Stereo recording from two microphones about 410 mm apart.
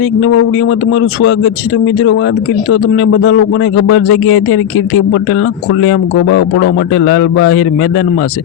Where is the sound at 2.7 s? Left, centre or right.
Left.